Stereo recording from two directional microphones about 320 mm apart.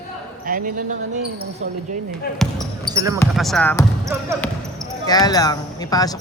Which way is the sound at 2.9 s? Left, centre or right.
Centre.